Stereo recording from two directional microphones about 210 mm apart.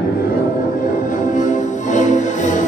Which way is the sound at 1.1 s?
35° left (ahead or behind).